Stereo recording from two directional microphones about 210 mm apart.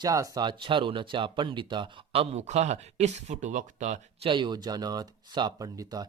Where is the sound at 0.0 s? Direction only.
15° right (ahead or behind).